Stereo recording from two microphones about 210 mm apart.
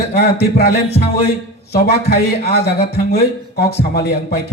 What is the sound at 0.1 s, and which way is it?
A man's voice, 50° left (ahead or behind).